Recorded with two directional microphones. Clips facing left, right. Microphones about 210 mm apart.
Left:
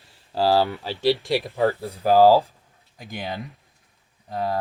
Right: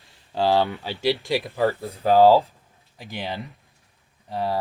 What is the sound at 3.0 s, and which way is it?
Speech, 45° left (ahead or behind).